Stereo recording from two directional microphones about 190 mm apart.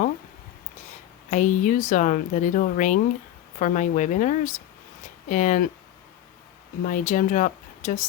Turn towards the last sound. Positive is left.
turn(degrees=45)  # may be behind; listen again after turning